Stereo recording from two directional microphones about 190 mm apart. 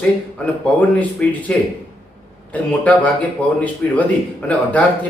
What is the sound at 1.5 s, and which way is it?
Speech, 5° left (ahead or behind).